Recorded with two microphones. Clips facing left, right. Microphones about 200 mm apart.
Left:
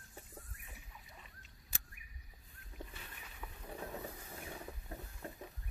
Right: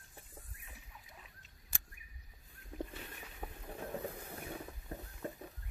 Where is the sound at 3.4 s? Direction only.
50° right (ahead or behind).